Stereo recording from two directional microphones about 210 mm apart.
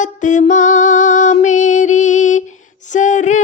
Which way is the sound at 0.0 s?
35° left (ahead or behind).